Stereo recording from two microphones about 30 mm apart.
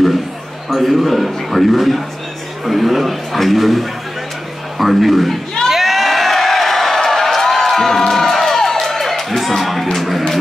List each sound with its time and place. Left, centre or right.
0.7 s a man's voice: centre
5.7 s crowd: centre
9.9 s a sound: centre